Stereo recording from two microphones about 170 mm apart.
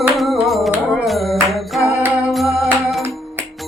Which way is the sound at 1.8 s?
15° left (ahead or behind).